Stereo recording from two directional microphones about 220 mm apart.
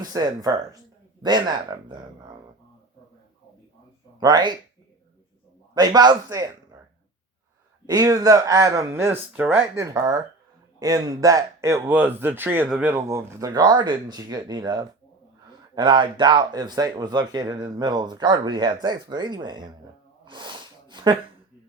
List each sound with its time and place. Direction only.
0.0 s speech: 15° right (ahead or behind)
4.2 s speech: 20° right (ahead or behind)
5.7 s speech: 20° right (ahead or behind)
7.9 s speech: 15° right (ahead or behind)
20.2 s snort: 20° right (ahead or behind)